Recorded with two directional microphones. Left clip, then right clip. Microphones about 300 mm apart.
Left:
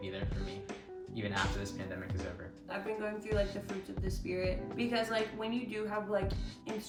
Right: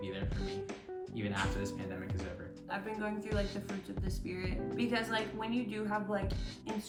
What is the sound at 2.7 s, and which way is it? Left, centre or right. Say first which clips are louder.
Speech: left 1 dB; centre.